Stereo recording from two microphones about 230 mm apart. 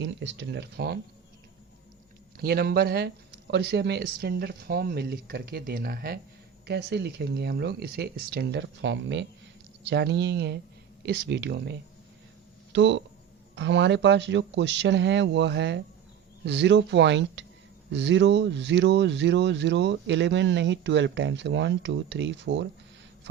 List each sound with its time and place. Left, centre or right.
0.0 s speech: right
2.4 s speech: right